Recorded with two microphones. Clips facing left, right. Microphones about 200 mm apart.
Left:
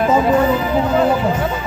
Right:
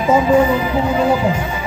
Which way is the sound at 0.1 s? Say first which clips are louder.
Right 5 dB; 10° right (ahead or behind).